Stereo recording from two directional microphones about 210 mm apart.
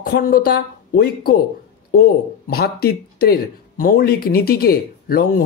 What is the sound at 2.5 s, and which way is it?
Speech, 45° left (ahead or behind).